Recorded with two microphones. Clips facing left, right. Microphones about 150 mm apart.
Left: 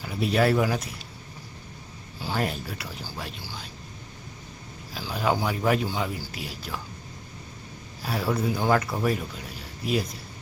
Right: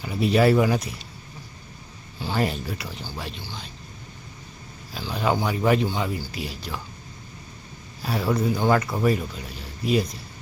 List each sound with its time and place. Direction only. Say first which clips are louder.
0.0 s speech: right 4 dB; centre (ahead or behind)
2.2 s speech: right 3 dB; centre (ahead or behind)
4.9 s speech: right 2 dB; 5° left (ahead or behind)
8.0 s speech: right 3 dB; centre (ahead or behind)